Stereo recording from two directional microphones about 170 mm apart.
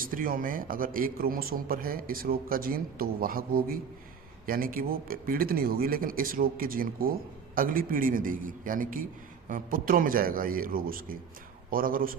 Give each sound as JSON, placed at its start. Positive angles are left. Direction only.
{"t": 0.1, "sound": "a man's voice", "side_deg": -55}